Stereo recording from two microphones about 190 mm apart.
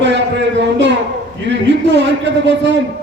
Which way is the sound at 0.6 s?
65° right (ahead or behind).